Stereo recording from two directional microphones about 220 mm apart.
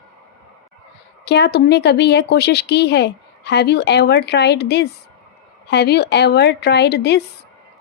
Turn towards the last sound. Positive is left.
turn(degrees=50)  # may be behind; listen again after turning